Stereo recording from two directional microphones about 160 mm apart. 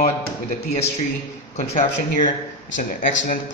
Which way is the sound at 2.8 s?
60° left (ahead or behind).